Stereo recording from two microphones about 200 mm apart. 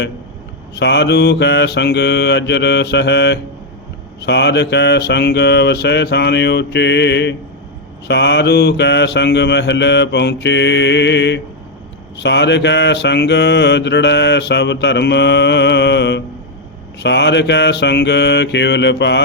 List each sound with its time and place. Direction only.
0.8 s mantra: 60° left (ahead or behind)